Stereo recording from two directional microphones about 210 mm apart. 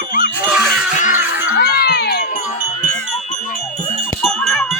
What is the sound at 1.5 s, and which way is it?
Music, 50° left (ahead or behind).